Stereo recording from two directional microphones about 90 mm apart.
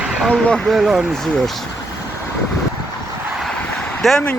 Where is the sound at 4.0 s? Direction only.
5° left (ahead or behind).